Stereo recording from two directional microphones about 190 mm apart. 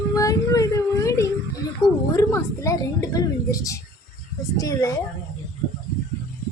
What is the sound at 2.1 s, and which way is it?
A woman's voice, 20° left (ahead or behind).